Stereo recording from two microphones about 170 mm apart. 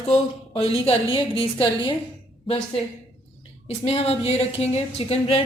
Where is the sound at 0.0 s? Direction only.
35° left (ahead or behind).